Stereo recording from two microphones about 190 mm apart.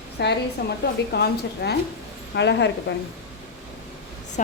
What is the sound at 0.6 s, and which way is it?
A woman's voice, 50° left (ahead or behind).